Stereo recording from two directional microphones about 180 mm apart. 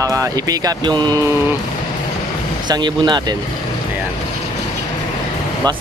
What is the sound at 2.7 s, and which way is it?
Speech, 25° right (ahead or behind).